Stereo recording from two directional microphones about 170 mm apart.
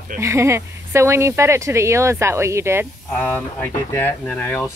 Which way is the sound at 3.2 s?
10° left (ahead or behind).